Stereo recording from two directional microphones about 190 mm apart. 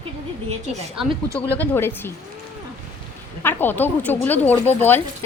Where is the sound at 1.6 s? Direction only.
10° left (ahead or behind).